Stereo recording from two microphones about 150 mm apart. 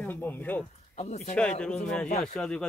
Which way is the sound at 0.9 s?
45° left (ahead or behind).